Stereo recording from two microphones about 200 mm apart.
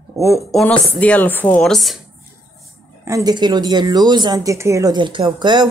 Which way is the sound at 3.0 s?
15° right (ahead or behind).